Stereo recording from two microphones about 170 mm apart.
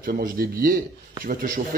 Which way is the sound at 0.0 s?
60° right (ahead or behind).